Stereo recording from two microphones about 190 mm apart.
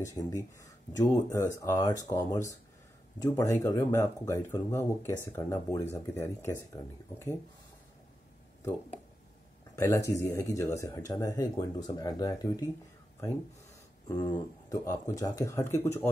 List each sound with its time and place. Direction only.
0.0 s speech: 20° left (ahead or behind)
9.8 s speech: 15° left (ahead or behind)
14.0 s speech: 20° left (ahead or behind)